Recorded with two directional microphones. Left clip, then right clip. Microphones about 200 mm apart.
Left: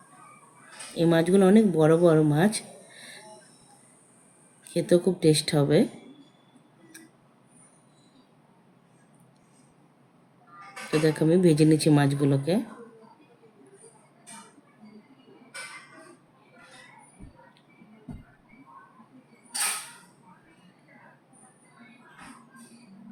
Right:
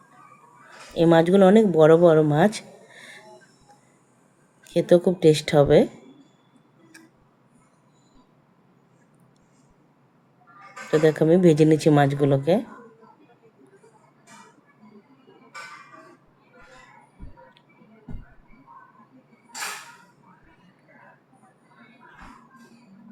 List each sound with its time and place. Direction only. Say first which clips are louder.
0.9 s speech: right 5 dB; 15° right (ahead or behind)
4.7 s speech: right 5 dB; 20° right (ahead or behind)
10.9 s speech: right 5 dB; 15° right (ahead or behind)